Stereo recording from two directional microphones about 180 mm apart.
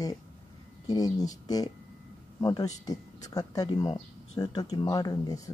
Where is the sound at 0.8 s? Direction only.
20° left (ahead or behind).